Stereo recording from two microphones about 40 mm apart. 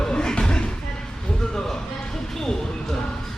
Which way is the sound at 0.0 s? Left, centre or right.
Centre.